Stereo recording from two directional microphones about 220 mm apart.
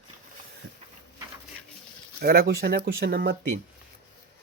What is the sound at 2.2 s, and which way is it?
Speech, 45° right (ahead or behind).